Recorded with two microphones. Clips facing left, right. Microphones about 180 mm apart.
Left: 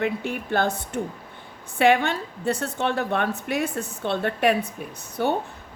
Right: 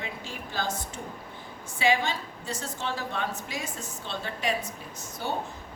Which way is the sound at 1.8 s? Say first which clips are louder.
Left 7 dB; 60° left (ahead or behind).